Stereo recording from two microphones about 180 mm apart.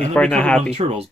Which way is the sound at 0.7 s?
35° right (ahead or behind).